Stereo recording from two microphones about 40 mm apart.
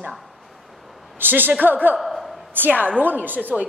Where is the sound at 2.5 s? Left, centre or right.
Right.